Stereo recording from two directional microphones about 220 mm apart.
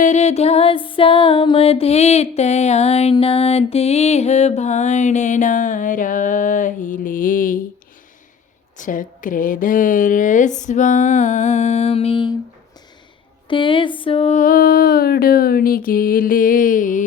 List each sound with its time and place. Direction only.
0.0 s music: 30° left (ahead or behind)
8.8 s a woman's voice: 35° left (ahead or behind)
13.5 s a woman's voice: 25° left (ahead or behind)